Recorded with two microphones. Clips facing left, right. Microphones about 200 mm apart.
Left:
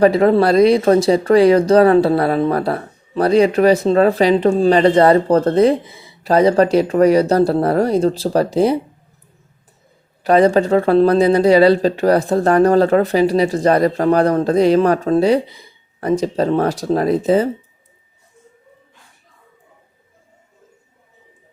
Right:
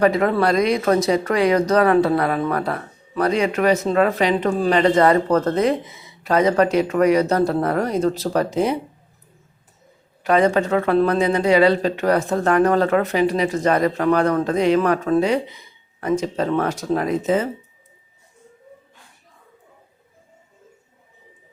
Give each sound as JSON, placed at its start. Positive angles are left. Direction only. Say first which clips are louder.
{"t": 0.0, "sound": "speech", "louder": "left 5 dB", "side_deg": 30}
{"t": 10.2, "sound": "speech", "louder": "left 5 dB", "side_deg": 35}